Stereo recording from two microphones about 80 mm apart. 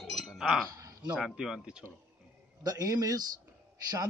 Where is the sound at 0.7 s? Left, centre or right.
Right.